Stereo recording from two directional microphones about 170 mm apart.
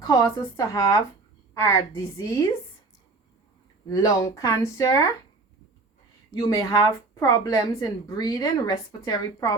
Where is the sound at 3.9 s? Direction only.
20° left (ahead or behind).